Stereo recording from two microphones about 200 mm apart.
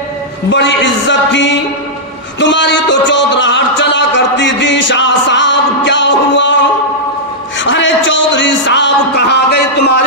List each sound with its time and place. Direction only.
0.5 s a man's voice: 65° left (ahead or behind)
7.6 s a man's voice: 70° left (ahead or behind)